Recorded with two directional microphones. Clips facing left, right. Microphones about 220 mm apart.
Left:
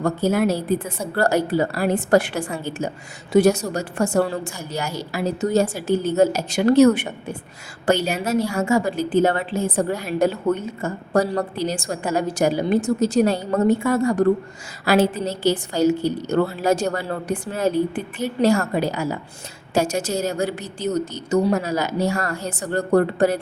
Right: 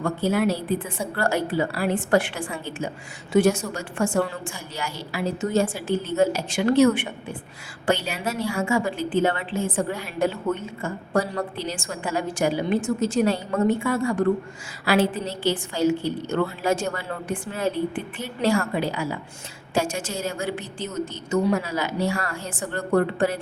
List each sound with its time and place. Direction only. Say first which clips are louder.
0.0 s a woman's voice: left 3 dB; 40° left (ahead or behind)